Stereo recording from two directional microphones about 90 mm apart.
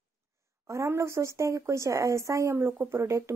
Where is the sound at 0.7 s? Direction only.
35° right (ahead or behind).